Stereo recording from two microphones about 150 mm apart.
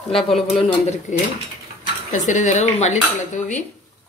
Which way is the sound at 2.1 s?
55° left (ahead or behind).